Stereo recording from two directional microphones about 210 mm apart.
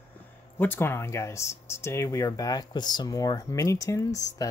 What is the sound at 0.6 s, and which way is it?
Speech, 10° left (ahead or behind).